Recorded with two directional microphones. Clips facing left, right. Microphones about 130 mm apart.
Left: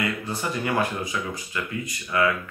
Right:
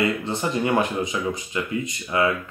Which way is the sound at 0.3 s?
25° right (ahead or behind).